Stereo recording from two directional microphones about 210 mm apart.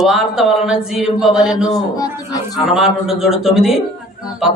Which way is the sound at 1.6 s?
15° left (ahead or behind).